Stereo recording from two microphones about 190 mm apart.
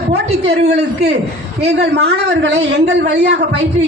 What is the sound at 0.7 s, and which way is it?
A woman's voice, 60° right (ahead or behind).